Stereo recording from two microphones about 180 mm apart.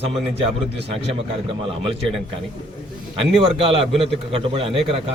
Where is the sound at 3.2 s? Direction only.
30° right (ahead or behind).